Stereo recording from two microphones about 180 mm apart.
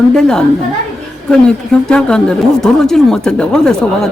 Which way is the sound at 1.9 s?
5° left (ahead or behind).